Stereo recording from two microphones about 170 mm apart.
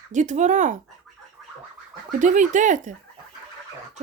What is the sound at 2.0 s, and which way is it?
Speech, 45° right (ahead or behind).